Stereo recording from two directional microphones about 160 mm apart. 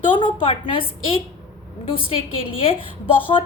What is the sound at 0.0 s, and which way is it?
A woman's voice, 30° left (ahead or behind).